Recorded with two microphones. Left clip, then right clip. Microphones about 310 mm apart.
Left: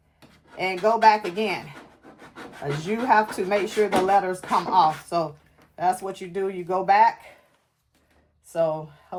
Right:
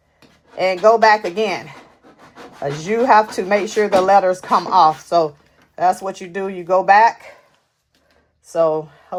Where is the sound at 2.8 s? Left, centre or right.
Right.